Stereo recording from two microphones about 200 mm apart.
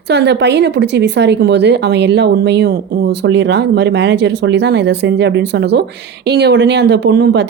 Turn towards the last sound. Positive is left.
turn(degrees=-60)  # may be behind; listen again after turning